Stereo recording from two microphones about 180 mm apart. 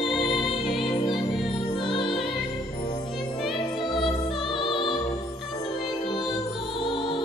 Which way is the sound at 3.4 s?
Centre (ahead or behind).